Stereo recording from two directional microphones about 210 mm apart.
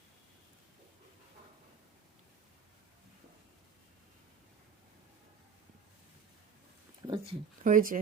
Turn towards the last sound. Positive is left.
turn(degrees=-40)  # may be behind; listen again after turning